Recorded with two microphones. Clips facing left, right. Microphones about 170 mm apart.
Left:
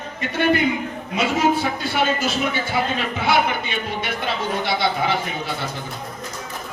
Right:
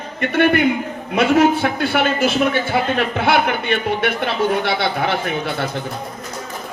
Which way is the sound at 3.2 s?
60° right (ahead or behind).